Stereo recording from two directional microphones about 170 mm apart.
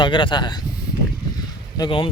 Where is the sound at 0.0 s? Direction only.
30° left (ahead or behind).